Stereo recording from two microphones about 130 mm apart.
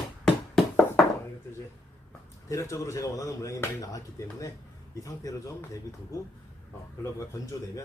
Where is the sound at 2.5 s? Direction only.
25° left (ahead or behind).